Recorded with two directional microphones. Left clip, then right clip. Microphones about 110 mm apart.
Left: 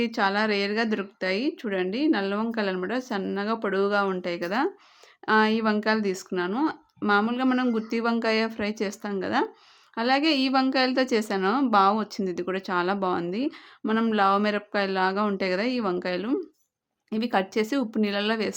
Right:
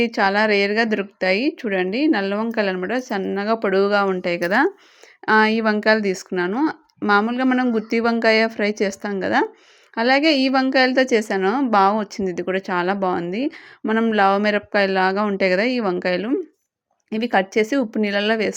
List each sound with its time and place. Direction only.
0.0 s a woman's voice: 35° right (ahead or behind); by 4.7 s 50° right (ahead or behind)
5.2 s a woman's voice: 40° right (ahead or behind)